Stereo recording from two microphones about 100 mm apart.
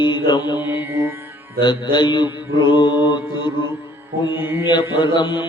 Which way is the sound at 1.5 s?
50° left (ahead or behind).